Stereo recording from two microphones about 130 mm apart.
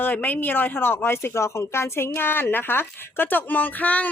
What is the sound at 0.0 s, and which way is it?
Speech, 15° left (ahead or behind).